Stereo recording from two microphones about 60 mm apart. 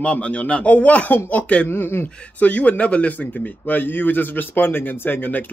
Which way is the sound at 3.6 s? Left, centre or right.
Left.